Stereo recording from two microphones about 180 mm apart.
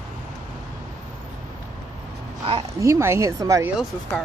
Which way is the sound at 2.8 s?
15° right (ahead or behind).